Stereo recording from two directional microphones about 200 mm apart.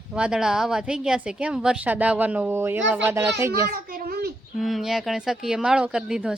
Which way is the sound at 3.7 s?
45° right (ahead or behind).